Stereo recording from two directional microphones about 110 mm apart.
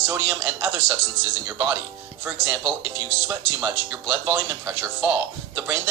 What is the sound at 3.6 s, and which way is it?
A man's voice, 20° right (ahead or behind).